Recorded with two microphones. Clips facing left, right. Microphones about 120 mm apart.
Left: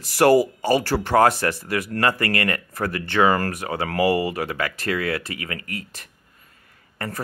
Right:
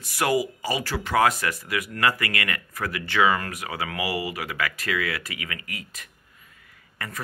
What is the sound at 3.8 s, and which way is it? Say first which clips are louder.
Speech: left 10 dB; 45° left (ahead or behind).